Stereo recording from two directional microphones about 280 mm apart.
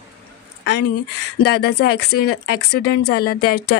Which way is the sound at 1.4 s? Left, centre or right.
Left.